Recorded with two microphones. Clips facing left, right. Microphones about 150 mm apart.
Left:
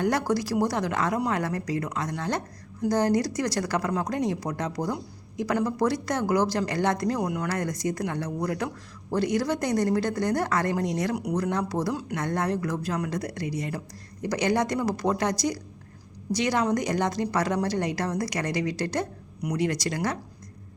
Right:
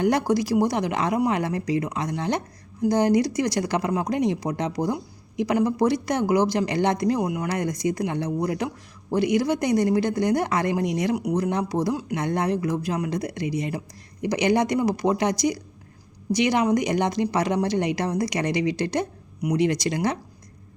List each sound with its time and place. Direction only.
0.0 s speech: 15° right (ahead or behind)